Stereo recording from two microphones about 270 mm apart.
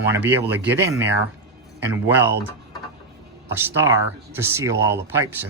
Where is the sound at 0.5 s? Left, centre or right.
Centre.